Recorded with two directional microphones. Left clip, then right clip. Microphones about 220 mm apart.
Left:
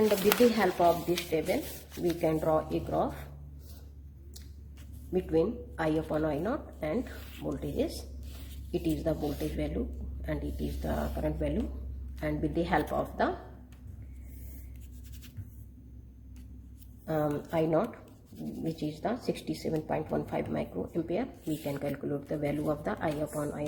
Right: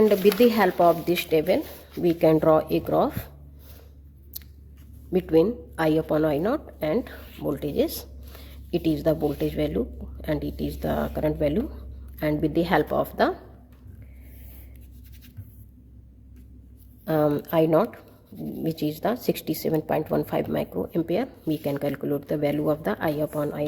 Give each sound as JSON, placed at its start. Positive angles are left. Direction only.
{"t": 0.6, "sound": "a woman's voice", "side_deg": -40}
{"t": 5.1, "sound": "a woman's voice", "side_deg": -40}
{"t": 17.1, "sound": "a woman's voice", "side_deg": -35}